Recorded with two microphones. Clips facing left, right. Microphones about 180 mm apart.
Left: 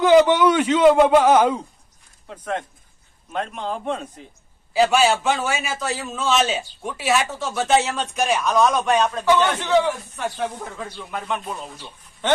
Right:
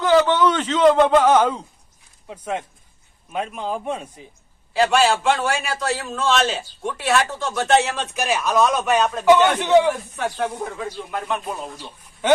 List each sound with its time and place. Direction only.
0.0 s a man's voice: 15° left (ahead or behind)
2.2 s a man's voice: 10° right (ahead or behind)
4.7 s a man's voice: centre (ahead or behind)
9.2 s a man's voice: 15° right (ahead or behind)
11.1 s a man's voice: centre (ahead or behind)